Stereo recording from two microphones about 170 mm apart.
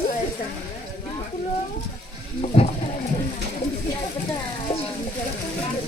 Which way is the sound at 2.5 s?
35° left (ahead or behind).